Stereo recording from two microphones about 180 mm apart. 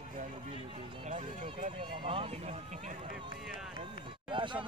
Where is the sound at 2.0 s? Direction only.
30° right (ahead or behind).